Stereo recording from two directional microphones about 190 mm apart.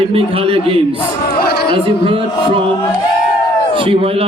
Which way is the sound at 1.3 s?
55° left (ahead or behind).